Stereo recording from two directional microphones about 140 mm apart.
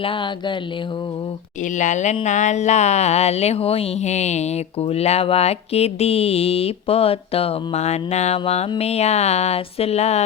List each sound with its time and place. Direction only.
0.0 s speech: 35° left (ahead or behind)
1.6 s speech: 60° left (ahead or behind)